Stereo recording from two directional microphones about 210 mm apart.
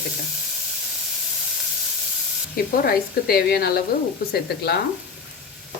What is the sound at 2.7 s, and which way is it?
Speech, 45° left (ahead or behind).